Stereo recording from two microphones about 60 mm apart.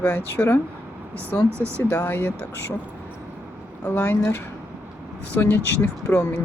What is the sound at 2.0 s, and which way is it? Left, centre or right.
Speech, left.